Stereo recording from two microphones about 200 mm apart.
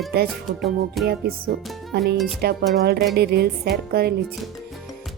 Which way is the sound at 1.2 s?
50° right (ahead or behind).